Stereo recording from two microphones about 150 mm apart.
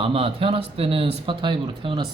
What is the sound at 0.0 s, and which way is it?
Speech, 40° right (ahead or behind).